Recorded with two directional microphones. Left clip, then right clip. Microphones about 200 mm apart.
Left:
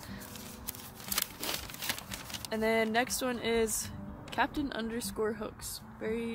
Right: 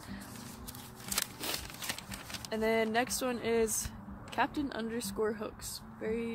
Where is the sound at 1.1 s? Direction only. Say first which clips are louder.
Left 1 dB; 15° left (ahead or behind).